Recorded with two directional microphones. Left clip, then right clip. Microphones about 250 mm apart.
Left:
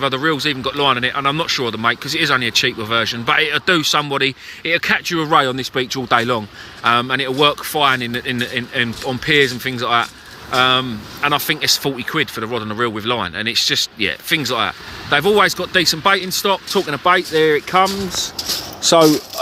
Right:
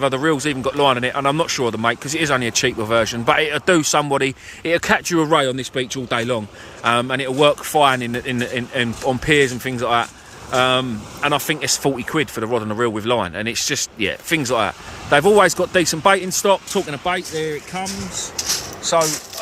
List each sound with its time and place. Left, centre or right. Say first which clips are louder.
0.0 s speech: left 1 dB; centre